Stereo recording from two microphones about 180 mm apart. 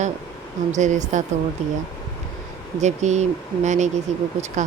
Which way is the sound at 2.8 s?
40° right (ahead or behind).